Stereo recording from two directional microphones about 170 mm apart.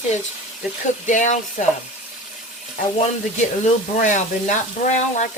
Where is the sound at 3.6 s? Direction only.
45° left (ahead or behind).